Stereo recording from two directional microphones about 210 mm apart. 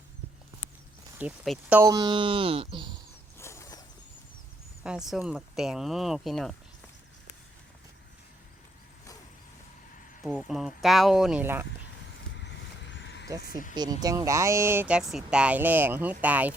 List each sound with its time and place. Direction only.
1.2 s speech: 5° right (ahead or behind); by 3.0 s 20° right (ahead or behind)
3.3 s a sound: 10° left (ahead or behind)
4.8 s speech: 5° right (ahead or behind)
10.2 s speech: 5° right (ahead or behind)
12.3 s vehicle: 55° left (ahead or behind)
13.4 s speech: 40° left (ahead or behind)
13.7 s speech: 20° right (ahead or behind)